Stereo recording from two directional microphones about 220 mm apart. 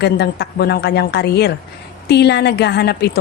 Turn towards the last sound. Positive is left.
turn(degrees=50)  # may be behind; listen again after turning